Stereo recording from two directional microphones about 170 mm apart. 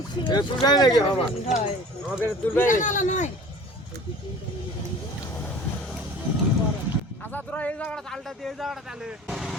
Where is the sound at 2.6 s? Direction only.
50° left (ahead or behind).